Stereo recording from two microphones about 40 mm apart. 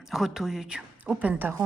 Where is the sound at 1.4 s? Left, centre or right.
Right.